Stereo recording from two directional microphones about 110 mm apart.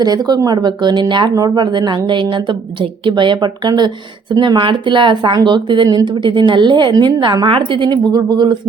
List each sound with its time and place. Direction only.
0.0 s speech: 35° right (ahead or behind)